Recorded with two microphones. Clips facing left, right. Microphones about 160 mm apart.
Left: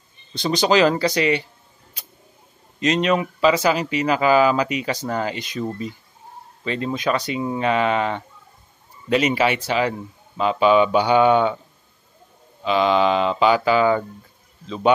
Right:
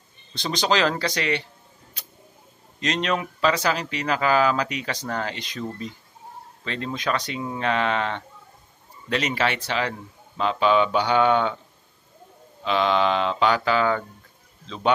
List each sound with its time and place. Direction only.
0.3 s speech: 5° left (ahead or behind)
2.8 s speech: 5° left (ahead or behind)
12.6 s speech: 5° left (ahead or behind)